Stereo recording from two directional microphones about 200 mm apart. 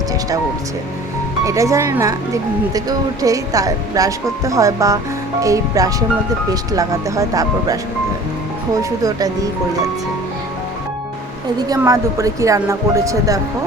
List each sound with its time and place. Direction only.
1.5 s speech: 15° right (ahead or behind)
8.8 s speech: 15° right (ahead or behind)
11.8 s speech: 15° right (ahead or behind)